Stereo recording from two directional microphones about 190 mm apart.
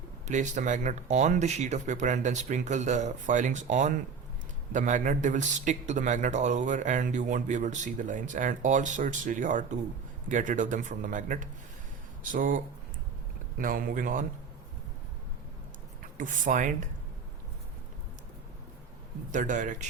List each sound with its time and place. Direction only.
0.3 s a man's voice: 40° right (ahead or behind)
16.1 s speech: 40° right (ahead or behind)
19.3 s a man's voice: 40° right (ahead or behind)